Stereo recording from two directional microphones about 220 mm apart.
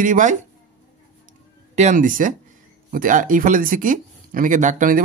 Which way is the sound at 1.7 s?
35° right (ahead or behind).